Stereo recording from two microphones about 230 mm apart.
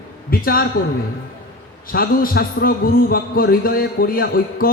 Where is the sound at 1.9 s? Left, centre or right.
Left.